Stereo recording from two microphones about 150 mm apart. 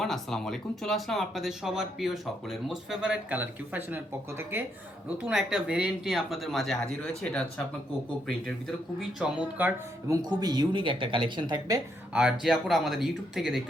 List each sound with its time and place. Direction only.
0.0 s speech: 5° left (ahead or behind)
8.4 s speech: centre (ahead or behind)
10.1 s speech: 25° right (ahead or behind)
12.1 s speech: 5° right (ahead or behind)